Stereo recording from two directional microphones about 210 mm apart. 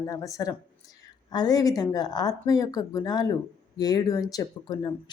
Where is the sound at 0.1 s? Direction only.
15° left (ahead or behind).